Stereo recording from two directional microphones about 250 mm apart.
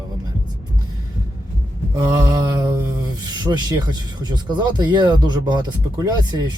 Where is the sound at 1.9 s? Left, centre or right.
Centre.